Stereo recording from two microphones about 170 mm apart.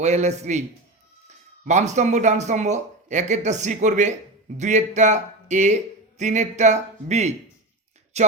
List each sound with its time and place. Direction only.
0.0 s a man's voice: 40° right (ahead or behind)
1.6 s speech: 45° right (ahead or behind)